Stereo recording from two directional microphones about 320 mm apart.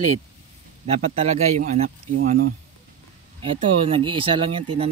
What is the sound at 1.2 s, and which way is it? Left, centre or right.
Speech, right.